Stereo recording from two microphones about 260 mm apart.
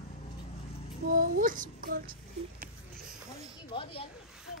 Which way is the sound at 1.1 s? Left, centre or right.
Right.